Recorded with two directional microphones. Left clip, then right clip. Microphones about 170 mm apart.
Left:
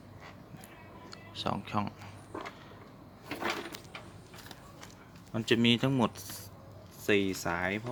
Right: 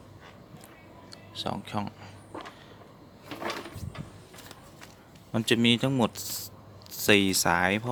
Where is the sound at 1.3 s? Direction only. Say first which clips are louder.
Right 1 dB; centre (ahead or behind).